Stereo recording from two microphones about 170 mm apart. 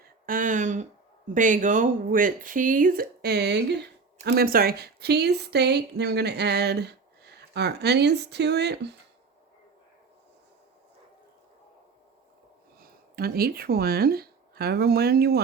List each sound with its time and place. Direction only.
0.0 s a sound: 55° right (ahead or behind)
1.3 s a woman's voice: 50° right (ahead or behind); by 8.9 s 80° right
12.8 s speech: 65° right (ahead or behind)